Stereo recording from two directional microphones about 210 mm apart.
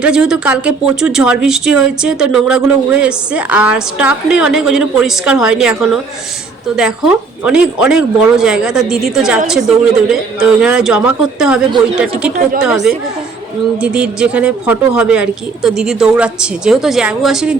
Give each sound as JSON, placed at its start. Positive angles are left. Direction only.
{"t": 0.0, "sound": "speech", "side_deg": -5}
{"t": 7.4, "sound": "speech", "side_deg": -5}